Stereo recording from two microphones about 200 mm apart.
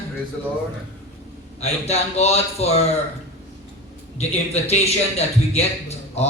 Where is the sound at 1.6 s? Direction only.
30° left (ahead or behind).